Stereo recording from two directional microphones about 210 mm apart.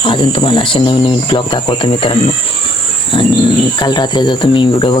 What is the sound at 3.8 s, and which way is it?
Cricket, 20° left (ahead or behind).